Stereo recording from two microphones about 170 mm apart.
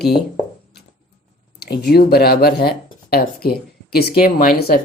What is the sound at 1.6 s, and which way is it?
Speech, 70° left (ahead or behind).